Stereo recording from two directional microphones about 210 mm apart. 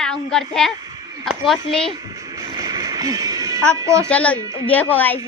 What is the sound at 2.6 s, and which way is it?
Music, 20° right (ahead or behind).